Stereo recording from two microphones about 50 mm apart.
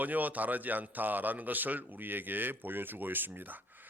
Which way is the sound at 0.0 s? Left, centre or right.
Right.